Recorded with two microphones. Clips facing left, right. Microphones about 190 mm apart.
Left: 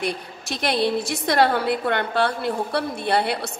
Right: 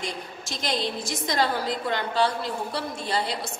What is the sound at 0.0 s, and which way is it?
A woman's voice, 65° left (ahead or behind).